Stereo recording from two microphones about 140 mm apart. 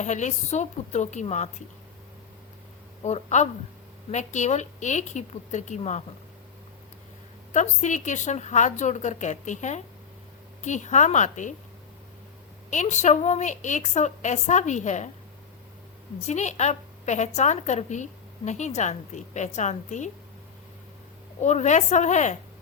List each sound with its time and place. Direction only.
0.0 s a woman's voice: 60° left (ahead or behind)
3.0 s a woman's voice: 50° left (ahead or behind)
7.5 s a woman's voice: 55° left (ahead or behind)
12.7 s a woman's voice: 60° left (ahead or behind)
16.2 s a woman's voice: 55° left (ahead or behind)
21.4 s a woman's voice: 55° left (ahead or behind)